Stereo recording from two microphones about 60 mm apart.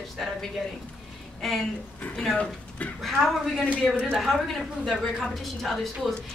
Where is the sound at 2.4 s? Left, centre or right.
Left.